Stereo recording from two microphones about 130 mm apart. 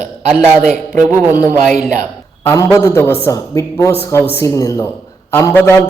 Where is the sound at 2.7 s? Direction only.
20° left (ahead or behind).